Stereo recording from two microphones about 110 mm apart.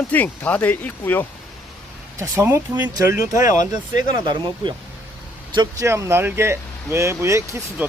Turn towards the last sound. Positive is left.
turn(degrees=-25)  # may be behind; listen again after turning